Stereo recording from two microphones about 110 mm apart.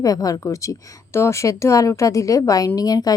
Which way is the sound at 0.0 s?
35° left (ahead or behind).